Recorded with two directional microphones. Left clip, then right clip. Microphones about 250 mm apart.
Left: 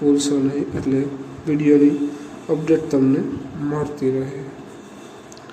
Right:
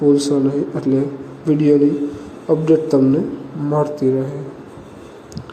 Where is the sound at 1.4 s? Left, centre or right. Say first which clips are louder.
Right 1 dB; centre.